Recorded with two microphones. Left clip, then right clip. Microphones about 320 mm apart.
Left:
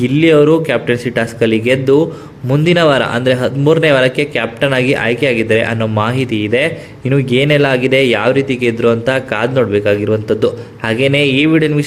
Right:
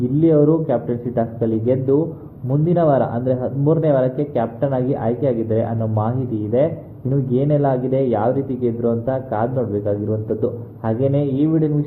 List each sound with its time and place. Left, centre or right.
0.2 s a man's voice: left
7.1 s a man's voice: left